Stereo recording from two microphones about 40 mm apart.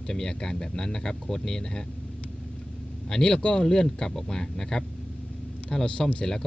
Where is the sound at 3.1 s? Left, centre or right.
Centre.